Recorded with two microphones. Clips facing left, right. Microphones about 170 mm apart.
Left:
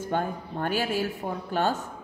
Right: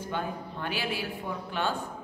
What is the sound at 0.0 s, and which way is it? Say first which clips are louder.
Speech: left 5 dB; 45° left (ahead or behind).